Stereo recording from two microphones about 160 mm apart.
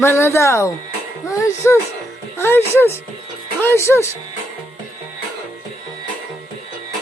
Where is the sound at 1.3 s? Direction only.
20° left (ahead or behind).